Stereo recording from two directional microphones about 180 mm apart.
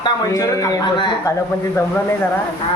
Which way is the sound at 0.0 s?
20° left (ahead or behind).